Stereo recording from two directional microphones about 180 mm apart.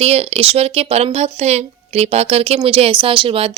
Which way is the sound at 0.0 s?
35° right (ahead or behind).